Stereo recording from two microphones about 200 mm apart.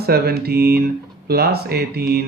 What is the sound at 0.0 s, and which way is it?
Speech, 50° right (ahead or behind).